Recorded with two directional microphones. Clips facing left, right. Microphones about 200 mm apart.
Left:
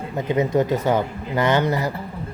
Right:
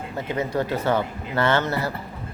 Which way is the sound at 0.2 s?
20° left (ahead or behind).